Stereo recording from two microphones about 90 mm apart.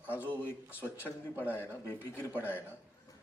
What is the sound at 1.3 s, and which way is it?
Speech, 20° right (ahead or behind).